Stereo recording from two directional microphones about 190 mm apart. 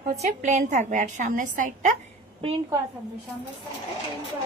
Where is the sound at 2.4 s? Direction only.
25° right (ahead or behind).